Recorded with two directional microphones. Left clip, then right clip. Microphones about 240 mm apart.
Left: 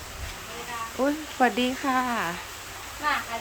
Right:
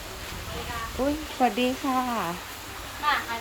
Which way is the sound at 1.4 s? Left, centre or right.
Centre.